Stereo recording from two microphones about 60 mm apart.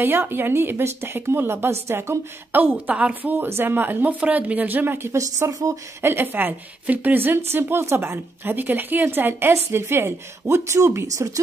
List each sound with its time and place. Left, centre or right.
0.2 s a woman's voice: right
2.5 s a woman's voice: right
5.1 s speech: right
6.0 s a woman's voice: right